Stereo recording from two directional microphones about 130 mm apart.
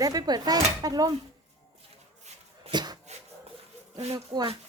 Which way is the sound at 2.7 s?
35° right (ahead or behind).